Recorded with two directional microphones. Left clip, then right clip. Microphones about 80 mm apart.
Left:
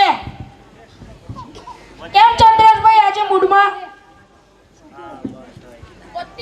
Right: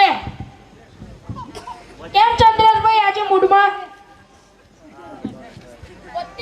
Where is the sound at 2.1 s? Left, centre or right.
Left.